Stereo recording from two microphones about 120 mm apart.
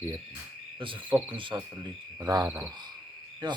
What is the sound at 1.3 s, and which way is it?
Cricket, 45° right (ahead or behind).